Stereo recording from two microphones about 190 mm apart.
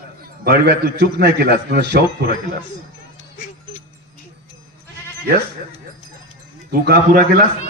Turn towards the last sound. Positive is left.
turn(degrees=-50)  # may be behind; listen again after turning